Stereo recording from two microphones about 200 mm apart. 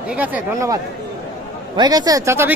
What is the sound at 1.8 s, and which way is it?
Speech, 20° right (ahead or behind).